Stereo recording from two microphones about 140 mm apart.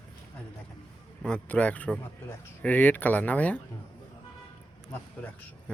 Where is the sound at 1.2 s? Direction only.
10° left (ahead or behind).